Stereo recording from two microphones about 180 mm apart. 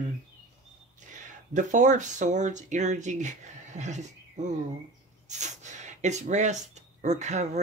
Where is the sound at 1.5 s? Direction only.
45° right (ahead or behind).